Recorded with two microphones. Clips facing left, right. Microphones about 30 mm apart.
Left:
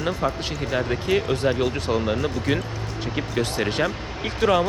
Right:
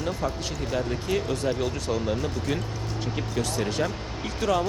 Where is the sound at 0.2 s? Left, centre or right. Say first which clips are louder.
Left 4 dB; left.